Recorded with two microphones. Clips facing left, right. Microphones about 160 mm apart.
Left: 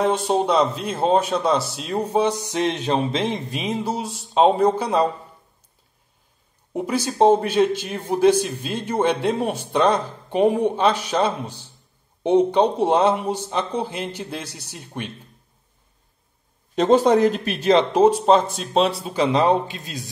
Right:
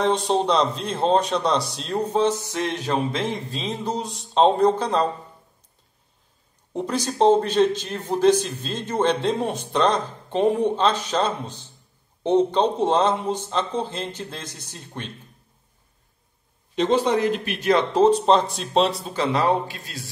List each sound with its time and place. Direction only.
0.0 s a man's voice: 5° left (ahead or behind)
6.7 s a man's voice: 10° left (ahead or behind)
16.7 s speech: 45° left (ahead or behind)
17.6 s speech: 20° left (ahead or behind); by 19.1 s centre (ahead or behind)
19.1 s a man's voice: 15° left (ahead or behind)